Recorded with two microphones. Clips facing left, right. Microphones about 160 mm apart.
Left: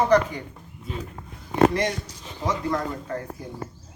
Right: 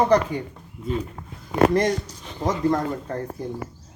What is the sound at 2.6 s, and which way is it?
Speech, 40° right (ahead or behind).